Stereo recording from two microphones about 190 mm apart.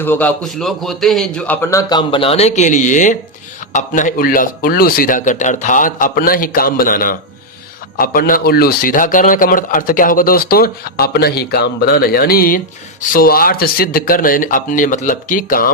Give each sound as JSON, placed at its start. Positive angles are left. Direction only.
{"t": 0.0, "sound": "a man's voice", "side_deg": 10}